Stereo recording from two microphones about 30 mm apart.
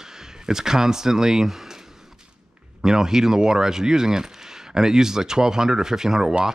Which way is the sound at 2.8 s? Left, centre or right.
Centre.